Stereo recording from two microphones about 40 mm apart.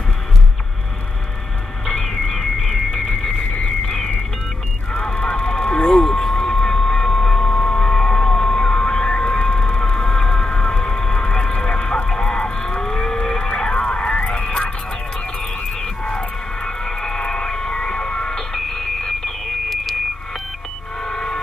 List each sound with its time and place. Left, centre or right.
2.0 s a sound: centre
3.8 s music: centre
4.9 s vehicle: left
6.0 s a sound: centre; by 14.3 s left
14.3 s music: centre
16.0 s vehicle: left; by 20.0 s centre
21.0 s vehicle: centre